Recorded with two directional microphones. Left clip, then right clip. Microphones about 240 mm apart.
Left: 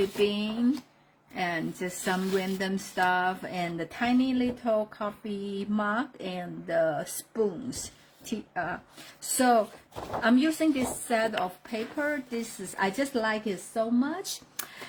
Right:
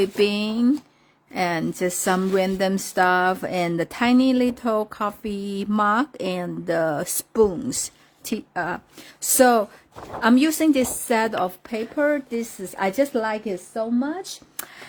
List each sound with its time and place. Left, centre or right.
0.2 s a woman's voice: right